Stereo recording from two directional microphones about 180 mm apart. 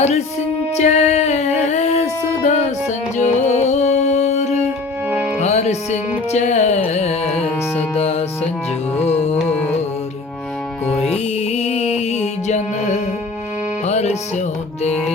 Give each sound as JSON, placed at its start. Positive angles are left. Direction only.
{"t": 0.8, "sound": "music", "side_deg": 40}
{"t": 10.9, "sound": "music", "side_deg": 35}